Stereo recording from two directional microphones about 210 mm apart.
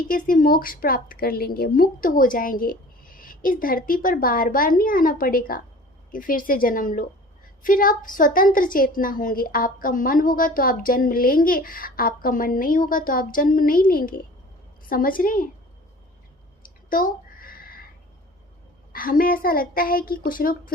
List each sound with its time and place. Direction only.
0.0 s a woman's voice: 40° left (ahead or behind)
16.6 s a sound: 40° left (ahead or behind)
18.9 s a woman's voice: 40° left (ahead or behind)